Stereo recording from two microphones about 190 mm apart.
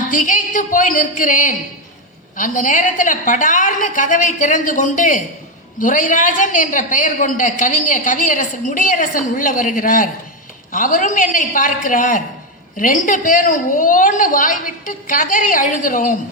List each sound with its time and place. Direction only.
0.1 s a woman's voice: 45° left (ahead or behind)